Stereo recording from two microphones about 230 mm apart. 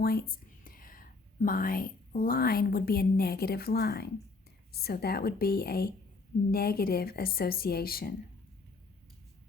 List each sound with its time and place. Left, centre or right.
0.0 s speech: left